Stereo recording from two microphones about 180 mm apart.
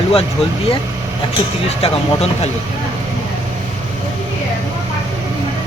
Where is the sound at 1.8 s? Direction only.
35° left (ahead or behind).